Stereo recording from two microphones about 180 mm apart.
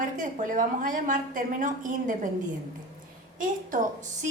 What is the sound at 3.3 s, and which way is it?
Speech, 45° right (ahead or behind).